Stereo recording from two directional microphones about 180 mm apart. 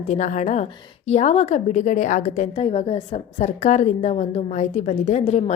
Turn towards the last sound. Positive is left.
turn(degrees=35)  # may be behind; listen again after turning